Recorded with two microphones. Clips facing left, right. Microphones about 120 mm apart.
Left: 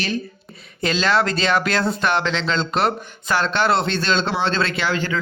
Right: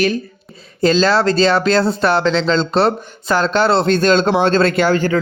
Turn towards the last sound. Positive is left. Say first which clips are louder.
# right 8 dB
turn(degrees=-40)  # may be behind; listen again after turning